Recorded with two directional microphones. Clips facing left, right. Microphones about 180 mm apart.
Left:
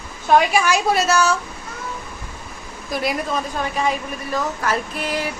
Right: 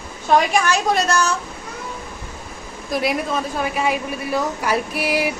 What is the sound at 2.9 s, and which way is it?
A woman's voice, centre (ahead or behind).